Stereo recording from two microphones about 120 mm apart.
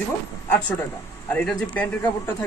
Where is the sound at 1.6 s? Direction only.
10° left (ahead or behind).